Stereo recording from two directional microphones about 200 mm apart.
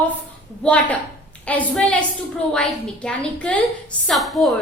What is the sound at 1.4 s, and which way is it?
Speech, 5° left (ahead or behind).